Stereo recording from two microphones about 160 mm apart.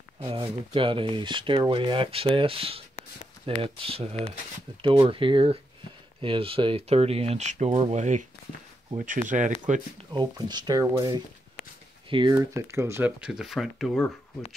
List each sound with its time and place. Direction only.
0.2 s speech: 35° right (ahead or behind); by 9.8 s 50° right (ahead or behind)
10.1 s speech: 25° right (ahead or behind)
12.4 s speech: 15° right (ahead or behind); by 13.9 s centre (ahead or behind)